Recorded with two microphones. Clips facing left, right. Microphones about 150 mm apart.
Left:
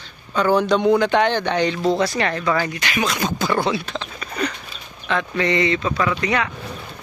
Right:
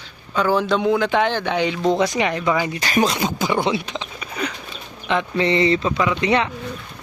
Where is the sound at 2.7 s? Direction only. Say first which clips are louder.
Right 4 dB; 40° right (ahead or behind).